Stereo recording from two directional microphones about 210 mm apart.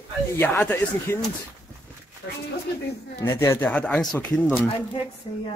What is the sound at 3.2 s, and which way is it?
Speech, 10° left (ahead or behind).